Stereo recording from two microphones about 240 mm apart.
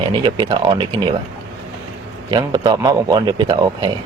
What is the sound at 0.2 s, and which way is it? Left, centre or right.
Speech, centre.